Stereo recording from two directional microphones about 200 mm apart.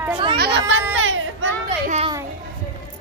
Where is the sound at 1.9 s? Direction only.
30° right (ahead or behind).